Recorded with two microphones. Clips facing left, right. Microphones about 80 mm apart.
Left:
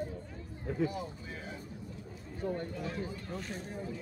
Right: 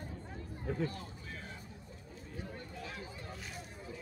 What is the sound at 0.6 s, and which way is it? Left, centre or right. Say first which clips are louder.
Speech: left 4 dB; centre.